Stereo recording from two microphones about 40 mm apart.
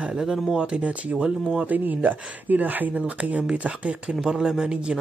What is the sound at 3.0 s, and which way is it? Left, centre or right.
Speech, right.